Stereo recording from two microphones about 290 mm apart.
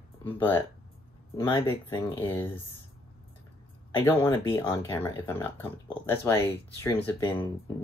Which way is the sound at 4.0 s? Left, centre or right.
Centre.